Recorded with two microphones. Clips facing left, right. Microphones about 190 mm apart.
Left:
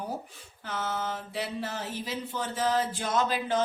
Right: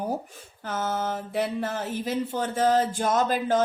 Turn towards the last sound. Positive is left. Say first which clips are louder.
# right 4 dB
turn(degrees=-45)  # may be behind; listen again after turning